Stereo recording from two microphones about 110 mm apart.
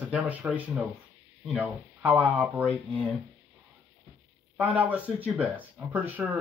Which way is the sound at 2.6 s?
15° left (ahead or behind).